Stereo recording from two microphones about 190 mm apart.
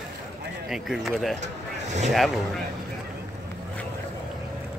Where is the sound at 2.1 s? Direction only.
Centre (ahead or behind).